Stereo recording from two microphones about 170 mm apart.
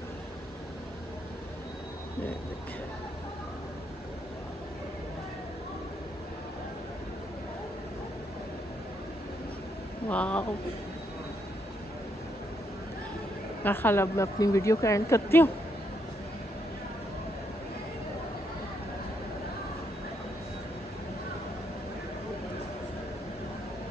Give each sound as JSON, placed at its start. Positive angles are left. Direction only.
{"t": 10.0, "sound": "speech", "side_deg": 5}
{"t": 13.7, "sound": "a woman's voice", "side_deg": 15}